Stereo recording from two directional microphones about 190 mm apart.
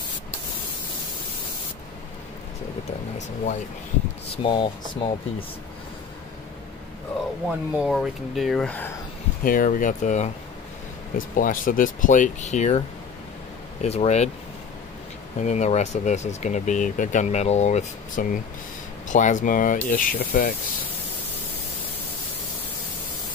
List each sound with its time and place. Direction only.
4.4 s speech: 25° left (ahead or behind)
7.7 s speech: 5° right (ahead or behind)
9.4 s speech: 45° left (ahead or behind)
13.8 s speech: 35° left (ahead or behind)
15.3 s speech: 35° left (ahead or behind); by 20.5 s 55° left (ahead or behind)